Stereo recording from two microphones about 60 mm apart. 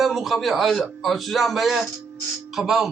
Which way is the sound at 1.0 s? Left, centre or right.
Centre.